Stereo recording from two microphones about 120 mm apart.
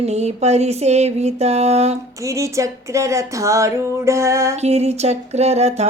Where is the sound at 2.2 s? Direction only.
25° right (ahead or behind).